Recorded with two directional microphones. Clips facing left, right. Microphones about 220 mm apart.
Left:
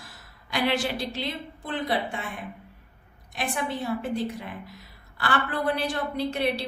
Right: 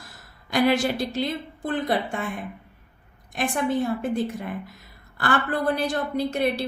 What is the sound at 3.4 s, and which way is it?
A woman's voice, 50° right (ahead or behind).